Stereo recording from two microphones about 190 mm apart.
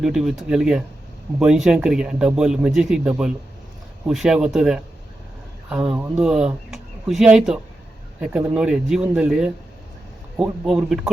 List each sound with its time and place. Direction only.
0.0 s a man's voice: centre (ahead or behind)